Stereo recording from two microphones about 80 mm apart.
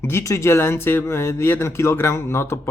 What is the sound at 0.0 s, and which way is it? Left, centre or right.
Speech, left.